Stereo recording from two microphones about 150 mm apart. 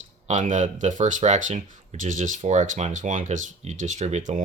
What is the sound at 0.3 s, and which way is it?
Speech, 55° right (ahead or behind).